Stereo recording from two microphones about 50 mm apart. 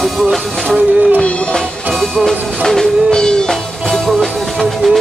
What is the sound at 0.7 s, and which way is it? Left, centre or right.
Music, right.